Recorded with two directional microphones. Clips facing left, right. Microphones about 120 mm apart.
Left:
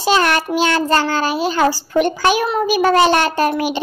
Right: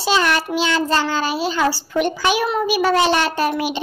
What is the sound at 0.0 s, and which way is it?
A child's voice, 50° left (ahead or behind).